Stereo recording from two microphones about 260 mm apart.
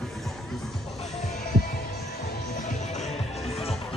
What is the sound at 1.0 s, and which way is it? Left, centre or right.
Heart sounds, left.